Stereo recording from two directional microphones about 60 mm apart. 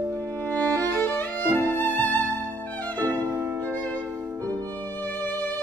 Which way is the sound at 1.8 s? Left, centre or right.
Left.